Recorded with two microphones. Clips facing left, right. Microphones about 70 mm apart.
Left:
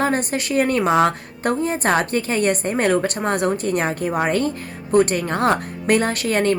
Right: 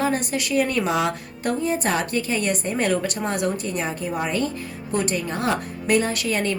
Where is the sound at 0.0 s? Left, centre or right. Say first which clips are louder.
Left 3 dB; left.